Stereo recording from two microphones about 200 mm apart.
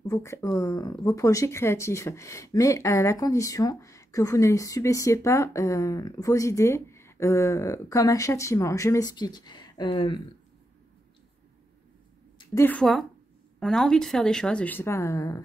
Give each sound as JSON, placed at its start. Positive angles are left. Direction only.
{"t": 0.0, "sound": "speech", "side_deg": 15}
{"t": 12.4, "sound": "a woman's voice", "side_deg": 10}